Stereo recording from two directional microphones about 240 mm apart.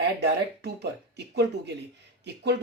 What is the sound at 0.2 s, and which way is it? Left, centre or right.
Speech, right.